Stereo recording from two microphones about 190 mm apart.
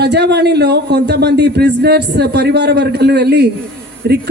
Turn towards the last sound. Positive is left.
turn(degrees=-60)  # may be behind; listen again after turning